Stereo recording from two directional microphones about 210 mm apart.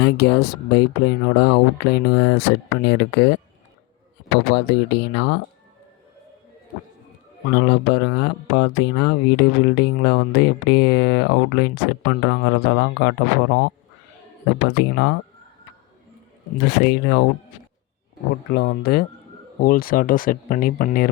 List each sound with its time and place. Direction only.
0.0 s speech: 50° left (ahead or behind)
4.5 s speech: 55° left (ahead or behind)
7.4 s speech: 55° left (ahead or behind)
14.8 s speech: 55° left (ahead or behind)
16.6 s speech: 55° left (ahead or behind)
18.5 s speech: 50° left (ahead or behind)